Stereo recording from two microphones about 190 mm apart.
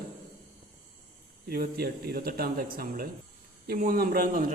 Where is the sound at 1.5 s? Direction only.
55° right (ahead or behind).